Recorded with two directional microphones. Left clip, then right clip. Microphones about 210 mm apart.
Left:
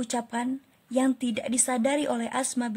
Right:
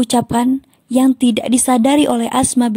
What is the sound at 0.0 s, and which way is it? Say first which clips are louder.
Speech: right 15 dB; 35° right (ahead or behind).